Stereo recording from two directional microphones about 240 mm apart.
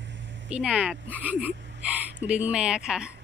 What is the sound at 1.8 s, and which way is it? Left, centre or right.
Speech, centre.